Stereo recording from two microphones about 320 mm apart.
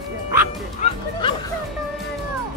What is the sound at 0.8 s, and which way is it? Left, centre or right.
Music, centre.